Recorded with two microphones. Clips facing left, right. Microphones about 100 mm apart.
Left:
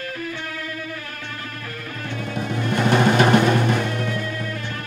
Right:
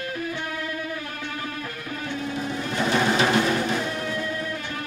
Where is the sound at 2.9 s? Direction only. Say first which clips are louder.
Left 5 dB; 55° left (ahead or behind).